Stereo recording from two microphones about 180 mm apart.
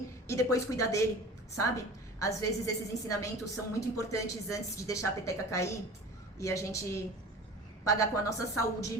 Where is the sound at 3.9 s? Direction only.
15° left (ahead or behind).